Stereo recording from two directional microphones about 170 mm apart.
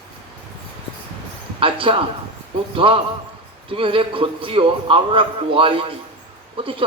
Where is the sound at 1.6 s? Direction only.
30° right (ahead or behind).